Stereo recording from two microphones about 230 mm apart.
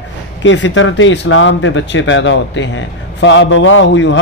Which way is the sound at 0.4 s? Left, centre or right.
Left.